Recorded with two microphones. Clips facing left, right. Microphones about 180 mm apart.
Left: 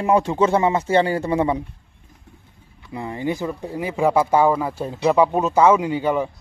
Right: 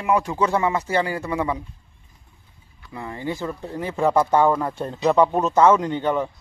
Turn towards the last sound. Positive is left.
turn(degrees=10)  # may be behind; listen again after turning